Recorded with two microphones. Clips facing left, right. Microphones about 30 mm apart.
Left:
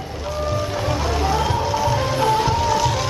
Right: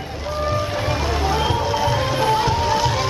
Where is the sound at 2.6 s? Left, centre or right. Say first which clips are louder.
Even; right.